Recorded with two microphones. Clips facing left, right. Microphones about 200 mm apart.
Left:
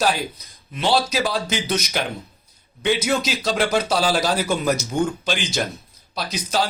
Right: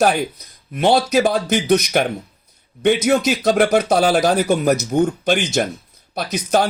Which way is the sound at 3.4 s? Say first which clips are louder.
Right 7 dB; 45° right (ahead or behind).